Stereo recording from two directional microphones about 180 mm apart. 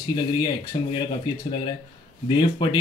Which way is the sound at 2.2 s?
25° left (ahead or behind).